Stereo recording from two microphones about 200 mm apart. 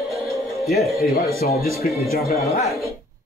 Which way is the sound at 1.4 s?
50° left (ahead or behind).